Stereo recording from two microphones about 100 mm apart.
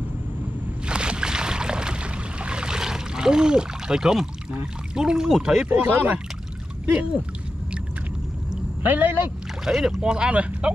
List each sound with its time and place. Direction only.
0.8 s boat: 10° right (ahead or behind)
4.9 s speech: 5° right (ahead or behind)
5.7 s speech: 15° right (ahead or behind)
8.8 s speech: 20° right (ahead or behind)
9.7 s speech: 5° right (ahead or behind)